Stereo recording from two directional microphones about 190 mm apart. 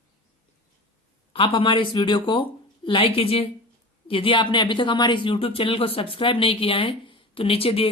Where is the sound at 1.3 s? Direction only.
30° left (ahead or behind).